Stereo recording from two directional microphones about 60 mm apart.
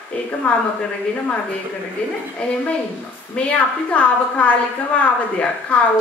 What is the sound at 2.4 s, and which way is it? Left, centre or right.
A woman's voice, centre.